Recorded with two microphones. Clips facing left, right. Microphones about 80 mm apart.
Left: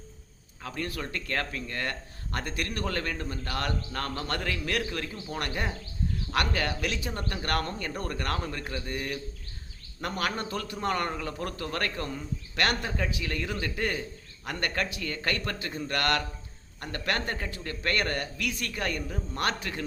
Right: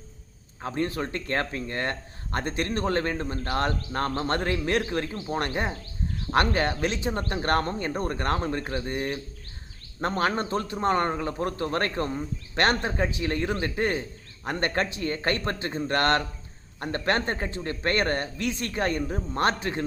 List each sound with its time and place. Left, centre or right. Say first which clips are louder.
0.6 s speech: right 6 dB; right